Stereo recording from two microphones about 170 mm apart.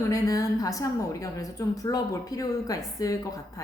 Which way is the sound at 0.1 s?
20° left (ahead or behind).